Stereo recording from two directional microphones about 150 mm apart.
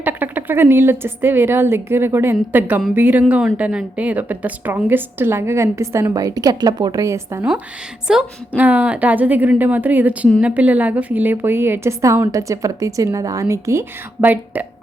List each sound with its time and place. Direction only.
0.0 s a woman's voice: 10° right (ahead or behind)
8.0 s a woman's voice: 5° right (ahead or behind)